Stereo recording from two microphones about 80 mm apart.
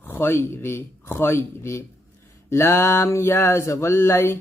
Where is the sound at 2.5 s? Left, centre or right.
Left.